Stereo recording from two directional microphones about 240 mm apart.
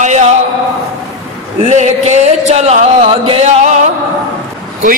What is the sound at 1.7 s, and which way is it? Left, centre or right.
Music, right.